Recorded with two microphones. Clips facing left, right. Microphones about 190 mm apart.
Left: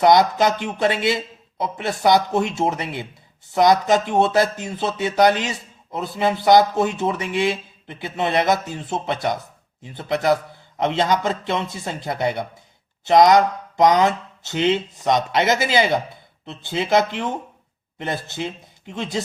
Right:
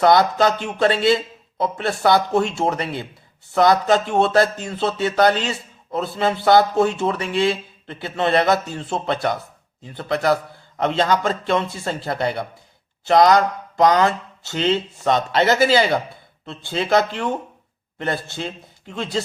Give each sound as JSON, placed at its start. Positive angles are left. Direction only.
{"t": 0.0, "sound": "a man's voice", "side_deg": 20}